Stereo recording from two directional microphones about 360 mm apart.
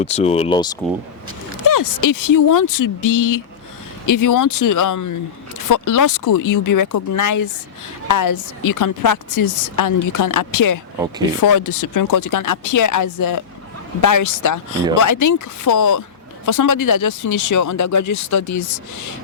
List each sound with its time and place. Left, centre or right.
0.0 s speech: centre
1.6 s a woman's voice: left